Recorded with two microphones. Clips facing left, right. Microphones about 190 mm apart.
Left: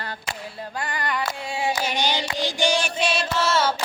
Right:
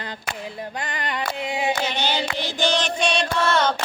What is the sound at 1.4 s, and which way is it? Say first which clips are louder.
Singing: right 2 dB; 20° right (ahead or behind).